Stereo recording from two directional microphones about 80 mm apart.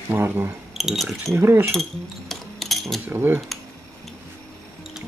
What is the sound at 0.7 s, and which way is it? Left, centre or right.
Speech, centre.